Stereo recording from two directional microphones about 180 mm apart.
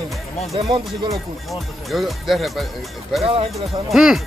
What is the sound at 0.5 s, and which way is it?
Speech, 30° right (ahead or behind).